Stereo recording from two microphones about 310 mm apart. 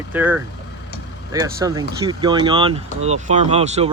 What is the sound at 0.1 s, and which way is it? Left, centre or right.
Speech, centre.